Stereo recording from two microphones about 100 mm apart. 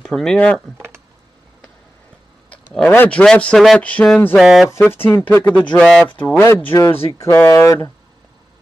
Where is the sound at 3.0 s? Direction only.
10° left (ahead or behind).